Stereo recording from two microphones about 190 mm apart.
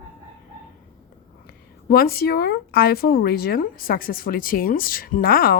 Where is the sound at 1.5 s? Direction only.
50° left (ahead or behind).